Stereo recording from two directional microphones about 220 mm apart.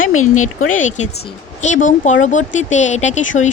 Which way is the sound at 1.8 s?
35° left (ahead or behind).